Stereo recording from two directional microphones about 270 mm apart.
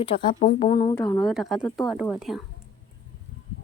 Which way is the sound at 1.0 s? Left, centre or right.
Centre.